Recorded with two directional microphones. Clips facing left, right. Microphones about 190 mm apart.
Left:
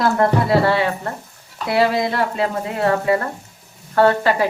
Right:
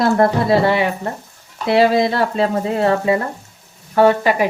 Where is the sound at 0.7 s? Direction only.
15° right (ahead or behind).